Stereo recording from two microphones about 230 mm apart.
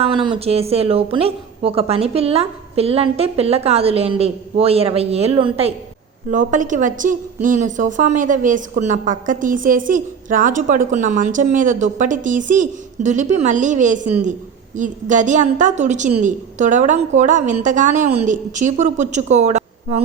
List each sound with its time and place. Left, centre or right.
0.0 s a woman's voice: right